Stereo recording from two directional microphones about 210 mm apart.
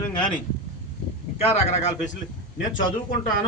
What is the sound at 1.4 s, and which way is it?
Speech, 30° left (ahead or behind).